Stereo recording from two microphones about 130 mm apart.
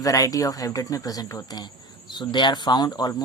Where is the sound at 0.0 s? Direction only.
25° left (ahead or behind).